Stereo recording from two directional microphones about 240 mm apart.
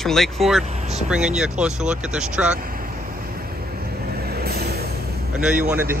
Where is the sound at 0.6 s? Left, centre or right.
Right.